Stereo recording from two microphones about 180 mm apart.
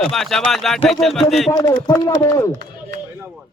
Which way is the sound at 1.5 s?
15° left (ahead or behind).